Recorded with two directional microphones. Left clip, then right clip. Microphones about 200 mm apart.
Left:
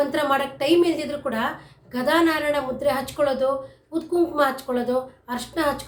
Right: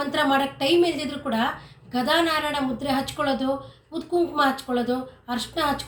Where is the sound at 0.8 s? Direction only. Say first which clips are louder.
Left 2 dB; 20° left (ahead or behind).